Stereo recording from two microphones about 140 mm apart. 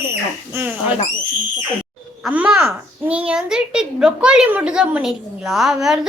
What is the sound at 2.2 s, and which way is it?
A child's voice, 5° right (ahead or behind).